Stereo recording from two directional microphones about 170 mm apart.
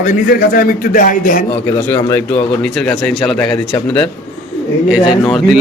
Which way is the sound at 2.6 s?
5° left (ahead or behind).